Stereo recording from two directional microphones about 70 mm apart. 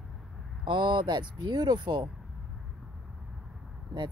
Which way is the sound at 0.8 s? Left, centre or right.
Right.